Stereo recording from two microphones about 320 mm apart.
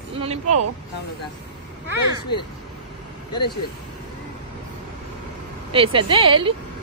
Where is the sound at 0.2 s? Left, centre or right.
Centre.